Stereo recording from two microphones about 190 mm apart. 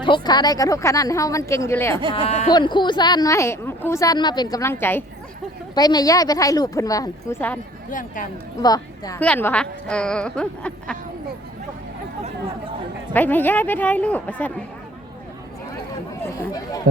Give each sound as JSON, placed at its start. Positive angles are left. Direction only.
{"t": 0.0, "sound": "a woman's voice", "side_deg": 25}
{"t": 2.1, "sound": "speech", "side_deg": 30}
{"t": 7.9, "sound": "speech", "side_deg": 45}
{"t": 8.6, "sound": "speech", "side_deg": 20}
{"t": 9.2, "sound": "a woman's voice", "side_deg": 10}
{"t": 13.1, "sound": "a woman's voice", "side_deg": 10}